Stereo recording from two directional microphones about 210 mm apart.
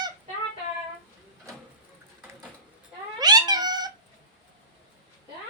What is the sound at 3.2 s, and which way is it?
Cat, 20° right (ahead or behind).